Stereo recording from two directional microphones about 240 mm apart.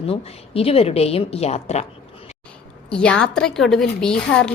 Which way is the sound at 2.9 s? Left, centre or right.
Centre.